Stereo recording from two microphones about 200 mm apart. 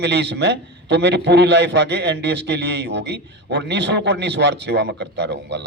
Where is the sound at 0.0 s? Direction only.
60° right (ahead or behind).